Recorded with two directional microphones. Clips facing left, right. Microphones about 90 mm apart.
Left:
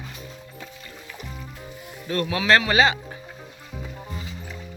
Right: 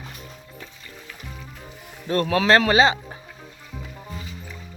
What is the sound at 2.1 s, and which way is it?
Speech, 35° right (ahead or behind).